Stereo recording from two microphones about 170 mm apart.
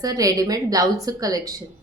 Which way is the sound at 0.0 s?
20° right (ahead or behind).